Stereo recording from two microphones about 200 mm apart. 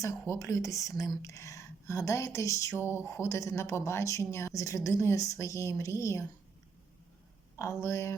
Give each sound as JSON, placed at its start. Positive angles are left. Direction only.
{"t": 0.0, "sound": "speech", "side_deg": 15}
{"t": 7.5, "sound": "speech", "side_deg": 15}